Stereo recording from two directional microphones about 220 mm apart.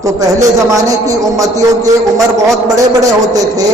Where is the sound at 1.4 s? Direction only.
15° right (ahead or behind).